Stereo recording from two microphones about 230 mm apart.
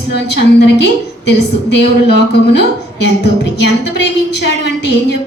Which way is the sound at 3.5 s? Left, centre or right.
Left.